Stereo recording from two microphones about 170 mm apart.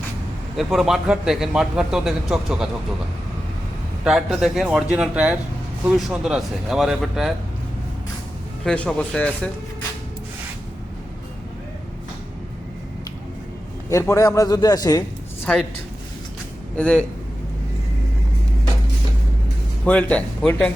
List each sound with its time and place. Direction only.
0.5 s a man's voice: centre (ahead or behind)
4.0 s a man's voice: centre (ahead or behind)
8.6 s speech: 5° left (ahead or behind)
13.9 s a man's voice: 20° left (ahead or behind)
16.7 s a man's voice: 5° left (ahead or behind)
19.8 s speech: 5° left (ahead or behind)